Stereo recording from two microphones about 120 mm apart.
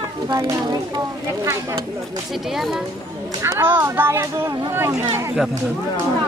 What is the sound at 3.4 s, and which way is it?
Speech, 20° right (ahead or behind).